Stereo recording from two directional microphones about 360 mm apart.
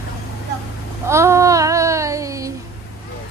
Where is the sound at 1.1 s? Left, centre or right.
Centre.